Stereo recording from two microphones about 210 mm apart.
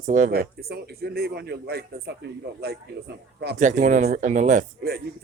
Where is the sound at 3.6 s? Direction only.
35° right (ahead or behind).